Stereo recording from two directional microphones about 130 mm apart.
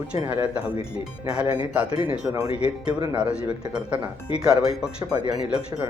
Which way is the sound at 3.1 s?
10° right (ahead or behind).